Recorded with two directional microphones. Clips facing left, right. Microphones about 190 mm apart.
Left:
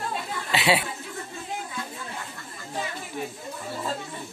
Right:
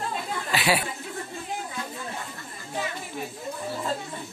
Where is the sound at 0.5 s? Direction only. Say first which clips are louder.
Left 2 dB; 25° left (ahead or behind).